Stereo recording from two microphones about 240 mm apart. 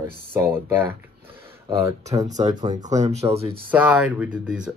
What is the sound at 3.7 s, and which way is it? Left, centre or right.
Speech, centre.